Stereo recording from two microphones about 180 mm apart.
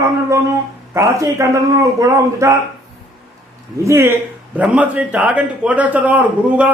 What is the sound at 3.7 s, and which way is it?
A man's voice, 15° right (ahead or behind).